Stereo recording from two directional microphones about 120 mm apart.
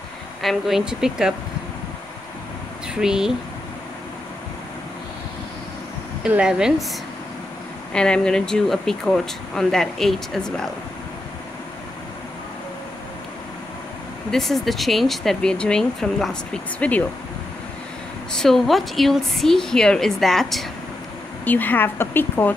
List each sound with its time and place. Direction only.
0.4 s speech: centre (ahead or behind)
2.9 s speech: 5° right (ahead or behind)
6.2 s speech: 10° right (ahead or behind)
7.9 s speech: 5° left (ahead or behind)
14.3 s speech: centre (ahead or behind)
18.3 s speech: 5° left (ahead or behind)
21.5 s a woman's voice: 15° left (ahead or behind)